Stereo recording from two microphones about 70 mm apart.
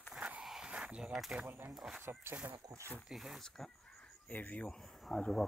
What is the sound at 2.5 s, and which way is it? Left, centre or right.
Speech, right.